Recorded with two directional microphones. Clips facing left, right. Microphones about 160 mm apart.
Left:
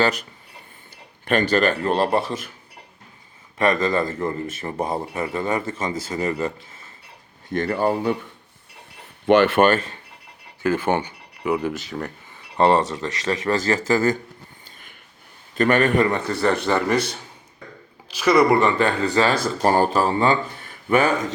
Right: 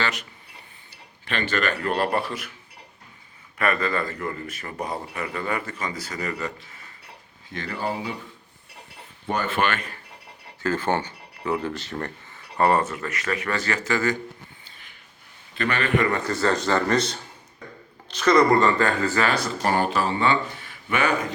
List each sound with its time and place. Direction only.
0.0 s speech: 35° left (ahead or behind)
1.3 s speech: 40° left (ahead or behind)
3.8 s a man's voice: 25° left (ahead or behind)
7.5 s speech: 55° left (ahead or behind)
9.2 s speech: 90° left
9.6 s speech: 40° left (ahead or behind)
10.6 s speech: 15° left (ahead or behind)
12.5 s a man's voice: 25° left (ahead or behind)
13.5 s speech: 35° left (ahead or behind)
15.5 s speech: 45° left (ahead or behind)
16.2 s speech: 15° left (ahead or behind)
18.1 s speech: 10° left (ahead or behind)
18.8 s a man's voice: 25° left (ahead or behind)
19.3 s speech: 35° left (ahead or behind)